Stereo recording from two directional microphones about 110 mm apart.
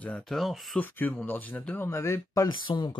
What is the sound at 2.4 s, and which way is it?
Speech, 45° left (ahead or behind).